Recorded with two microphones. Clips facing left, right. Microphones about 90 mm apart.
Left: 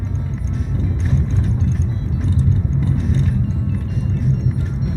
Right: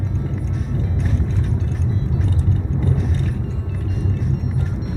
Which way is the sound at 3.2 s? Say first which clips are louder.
Left 5 dB; centre (ahead or behind).